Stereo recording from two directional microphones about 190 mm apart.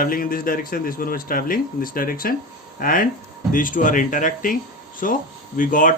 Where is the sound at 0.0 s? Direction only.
50° left (ahead or behind).